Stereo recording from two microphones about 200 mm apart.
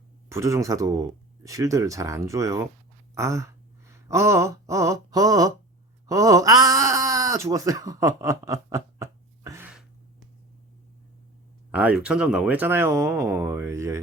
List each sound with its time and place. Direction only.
0.3 s speech: 15° right (ahead or behind)
3.2 s a sound: 15° right (ahead or behind)
6.1 s wail: 15° right (ahead or behind)
11.7 s speech: 5° right (ahead or behind)